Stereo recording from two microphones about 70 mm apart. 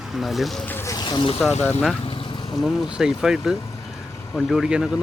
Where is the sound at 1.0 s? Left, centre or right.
Left.